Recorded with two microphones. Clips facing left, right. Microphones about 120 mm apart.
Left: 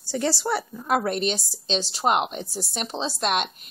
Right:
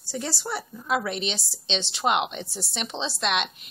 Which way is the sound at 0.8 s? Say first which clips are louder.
Left 3 dB; 50° left (ahead or behind).